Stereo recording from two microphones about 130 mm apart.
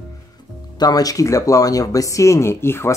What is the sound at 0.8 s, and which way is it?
Speech, 30° left (ahead or behind).